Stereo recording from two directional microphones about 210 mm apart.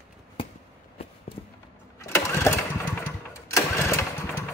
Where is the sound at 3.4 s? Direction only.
15° left (ahead or behind).